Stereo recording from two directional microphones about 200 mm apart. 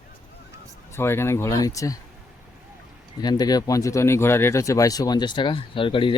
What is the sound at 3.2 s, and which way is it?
Speech, 20° left (ahead or behind).